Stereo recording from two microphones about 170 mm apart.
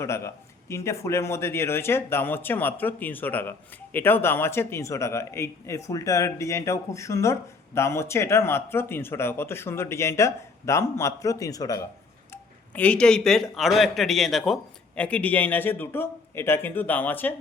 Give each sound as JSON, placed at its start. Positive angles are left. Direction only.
{"t": 0.0, "sound": "speech", "side_deg": 15}
{"t": 12.3, "sound": "speech", "side_deg": 10}